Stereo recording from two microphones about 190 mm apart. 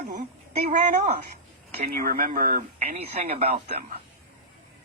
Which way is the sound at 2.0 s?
50° right (ahead or behind).